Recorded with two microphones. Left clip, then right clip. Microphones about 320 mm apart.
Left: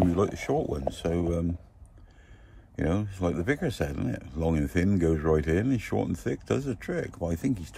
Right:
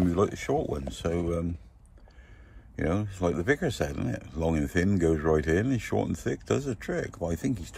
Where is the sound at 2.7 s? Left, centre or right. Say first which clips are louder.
Even; centre.